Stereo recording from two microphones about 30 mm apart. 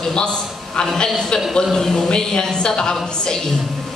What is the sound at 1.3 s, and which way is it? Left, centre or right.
Speech, left.